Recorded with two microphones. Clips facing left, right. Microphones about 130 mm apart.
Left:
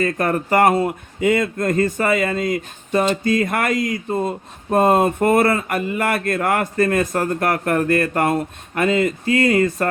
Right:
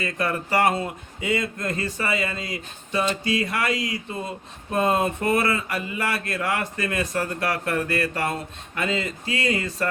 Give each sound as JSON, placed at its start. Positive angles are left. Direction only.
{"t": 0.0, "sound": "speech", "side_deg": 50}